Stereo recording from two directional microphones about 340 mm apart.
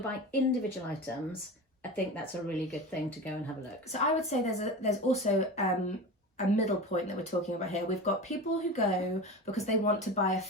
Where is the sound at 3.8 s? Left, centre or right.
Centre.